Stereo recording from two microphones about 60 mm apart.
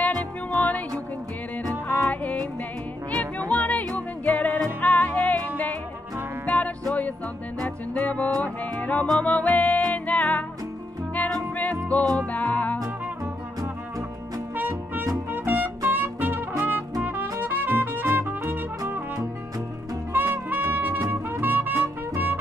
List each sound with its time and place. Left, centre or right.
0.0 s music: left
2.0 s music: left
6.4 s music: left
12.0 s music: right
12.3 s music: left
14.5 s music: right
17.0 s trumpet: right
20.1 s music: right
20.7 s trumpet: right
21.7 s music: right